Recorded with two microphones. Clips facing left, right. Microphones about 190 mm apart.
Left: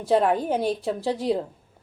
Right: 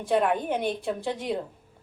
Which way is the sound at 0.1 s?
35° left (ahead or behind).